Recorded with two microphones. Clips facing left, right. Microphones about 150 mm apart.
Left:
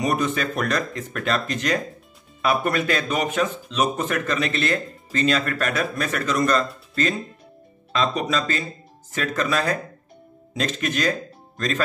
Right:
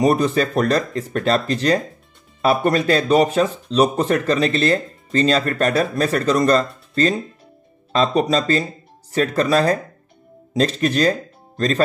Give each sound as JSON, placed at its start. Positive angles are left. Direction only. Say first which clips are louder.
{"t": 0.0, "sound": "speech", "louder": "right 6 dB", "side_deg": -35}